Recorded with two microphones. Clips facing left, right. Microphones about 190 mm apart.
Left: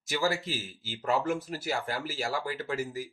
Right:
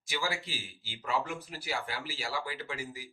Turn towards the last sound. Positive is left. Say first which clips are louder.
# left 7 dB
turn(degrees=45)  # may be behind; listen again after turning